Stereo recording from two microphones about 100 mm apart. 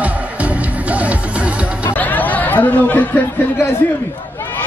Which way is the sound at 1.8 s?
15° left (ahead or behind).